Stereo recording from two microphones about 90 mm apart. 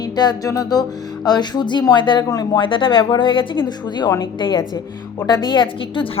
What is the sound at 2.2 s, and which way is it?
Music, 45° left (ahead or behind).